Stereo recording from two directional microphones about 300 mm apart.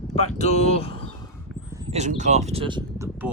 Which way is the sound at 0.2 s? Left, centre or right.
Left.